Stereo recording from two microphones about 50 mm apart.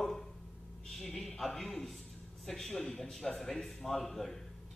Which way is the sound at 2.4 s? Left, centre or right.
Centre.